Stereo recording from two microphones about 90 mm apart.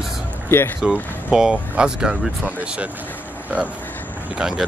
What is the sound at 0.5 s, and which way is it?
Speech, 25° left (ahead or behind).